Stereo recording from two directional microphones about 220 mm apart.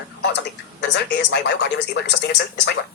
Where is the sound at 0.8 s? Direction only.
50° left (ahead or behind).